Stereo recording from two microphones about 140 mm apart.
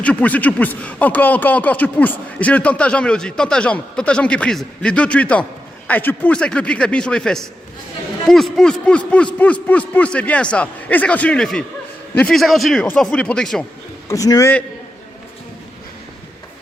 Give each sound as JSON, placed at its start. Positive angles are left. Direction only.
{"t": 0.0, "sound": "a man's voice", "side_deg": 10}
{"t": 14.1, "sound": "a man's voice", "side_deg": 25}